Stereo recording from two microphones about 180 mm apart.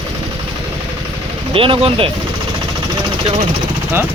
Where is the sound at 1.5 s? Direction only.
30° right (ahead or behind).